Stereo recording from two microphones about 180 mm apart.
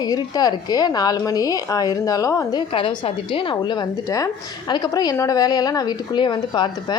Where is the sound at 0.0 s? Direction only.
20° left (ahead or behind).